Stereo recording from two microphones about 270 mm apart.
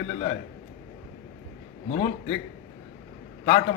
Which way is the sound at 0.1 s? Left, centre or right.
Centre.